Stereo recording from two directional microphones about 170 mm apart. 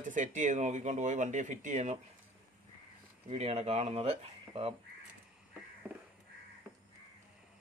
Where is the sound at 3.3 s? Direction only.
40° right (ahead or behind).